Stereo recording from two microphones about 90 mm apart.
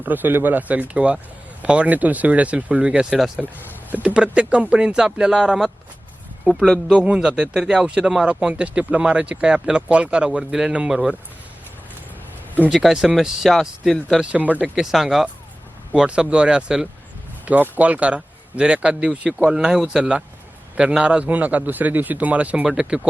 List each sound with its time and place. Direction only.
0.0 s speech: 20° right (ahead or behind); by 6.9 s 5° left (ahead or behind)
6.9 s speech: 15° right (ahead or behind)
12.6 s speech: 5° right (ahead or behind)
14.2 s speech: 15° right (ahead or behind)
14.8 s speech: 5° right (ahead or behind)